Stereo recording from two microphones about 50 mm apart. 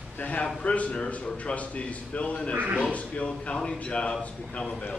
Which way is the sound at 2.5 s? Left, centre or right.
Right.